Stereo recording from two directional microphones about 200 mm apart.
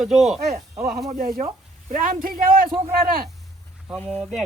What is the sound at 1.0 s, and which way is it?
Speech, 45° right (ahead or behind).